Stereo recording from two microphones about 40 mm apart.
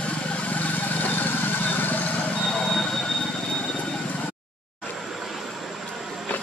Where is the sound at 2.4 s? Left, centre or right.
Centre.